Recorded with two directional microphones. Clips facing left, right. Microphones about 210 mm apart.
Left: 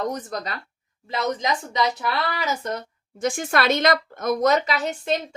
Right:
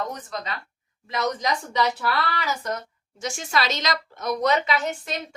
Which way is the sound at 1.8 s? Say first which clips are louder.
Even; 20° left (ahead or behind).